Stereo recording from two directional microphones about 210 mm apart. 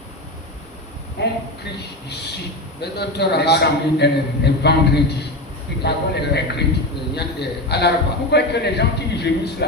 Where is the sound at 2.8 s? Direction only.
50° left (ahead or behind).